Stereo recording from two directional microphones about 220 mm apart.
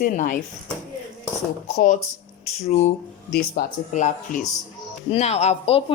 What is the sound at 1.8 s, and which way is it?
Speech, 35° left (ahead or behind).